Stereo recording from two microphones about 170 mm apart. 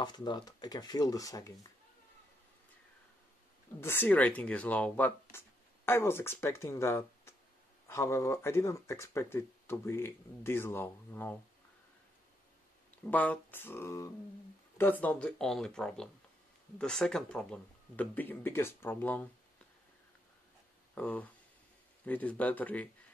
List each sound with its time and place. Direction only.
0.0 s speech: 25° left (ahead or behind)
3.8 s speech: 10° left (ahead or behind)
13.0 s speech: 10° left (ahead or behind)
20.9 s speech: 10° left (ahead or behind)